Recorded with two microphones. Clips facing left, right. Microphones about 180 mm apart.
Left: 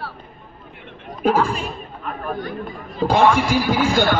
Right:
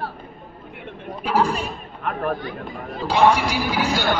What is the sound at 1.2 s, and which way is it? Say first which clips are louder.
Speech: left 3 dB; 50° left (ahead or behind).